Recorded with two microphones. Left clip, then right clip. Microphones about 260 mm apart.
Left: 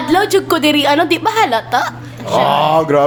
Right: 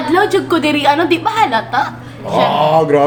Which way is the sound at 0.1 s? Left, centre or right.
Left.